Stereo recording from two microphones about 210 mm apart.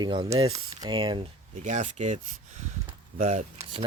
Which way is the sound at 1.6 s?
35° right (ahead or behind).